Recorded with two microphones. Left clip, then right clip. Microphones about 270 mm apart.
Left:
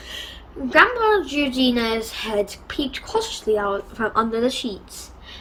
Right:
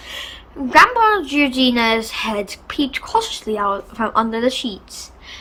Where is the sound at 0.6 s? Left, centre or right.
Centre.